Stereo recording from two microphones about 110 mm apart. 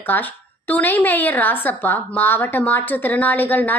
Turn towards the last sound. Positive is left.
turn(degrees=15)  # may be behind; listen again after turning